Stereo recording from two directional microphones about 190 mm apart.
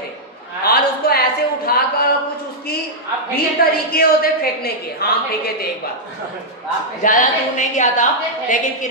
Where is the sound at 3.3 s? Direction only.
55° left (ahead or behind).